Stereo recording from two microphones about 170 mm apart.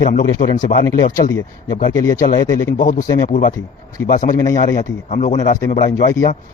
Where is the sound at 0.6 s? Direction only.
50° left (ahead or behind).